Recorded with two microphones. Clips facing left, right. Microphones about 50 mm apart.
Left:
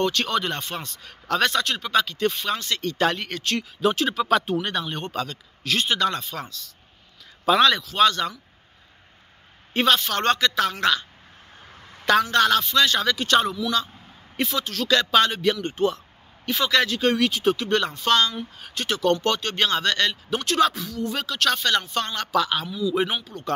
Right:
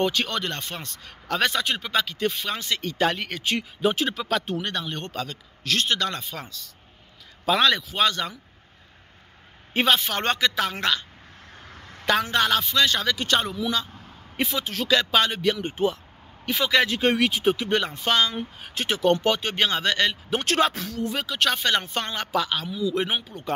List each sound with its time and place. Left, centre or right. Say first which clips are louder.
0.0 s speech: even; centre
0.3 s speech: left 4 dB; centre
9.8 s speech: left 1 dB; centre
12.1 s speech: left 3 dB; centre
14.3 s speech: left 1 dB; centre
20.4 s speech: left 2 dB; right
21.1 s speech: left 1 dB; centre